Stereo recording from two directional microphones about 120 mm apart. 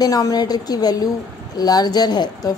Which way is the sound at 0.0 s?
30° left (ahead or behind).